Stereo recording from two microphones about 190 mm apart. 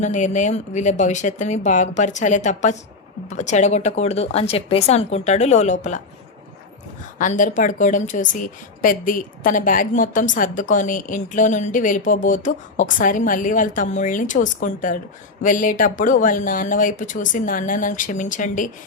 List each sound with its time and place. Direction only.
0.0 s a woman's voice: 40° left (ahead or behind)
7.2 s a woman's voice: 40° left (ahead or behind)